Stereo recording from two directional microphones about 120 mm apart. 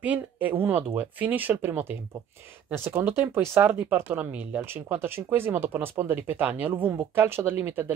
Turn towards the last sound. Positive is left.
turn(degrees=-15)  # may be behind; listen again after turning